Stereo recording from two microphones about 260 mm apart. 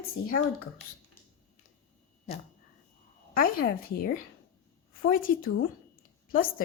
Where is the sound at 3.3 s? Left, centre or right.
Left.